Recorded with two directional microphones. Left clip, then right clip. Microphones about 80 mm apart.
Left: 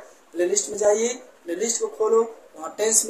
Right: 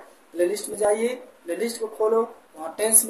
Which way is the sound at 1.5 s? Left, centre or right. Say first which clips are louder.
Left 2 dB; centre.